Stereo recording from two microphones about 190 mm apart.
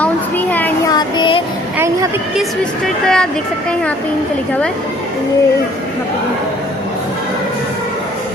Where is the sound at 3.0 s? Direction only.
5° left (ahead or behind).